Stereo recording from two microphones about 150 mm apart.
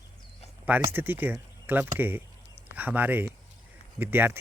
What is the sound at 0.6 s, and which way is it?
Speech, 15° right (ahead or behind).